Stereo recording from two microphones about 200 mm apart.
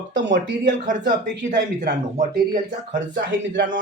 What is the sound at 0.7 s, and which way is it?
Speech, 40° right (ahead or behind).